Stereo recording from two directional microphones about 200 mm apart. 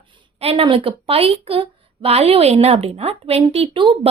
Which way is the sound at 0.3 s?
30° right (ahead or behind).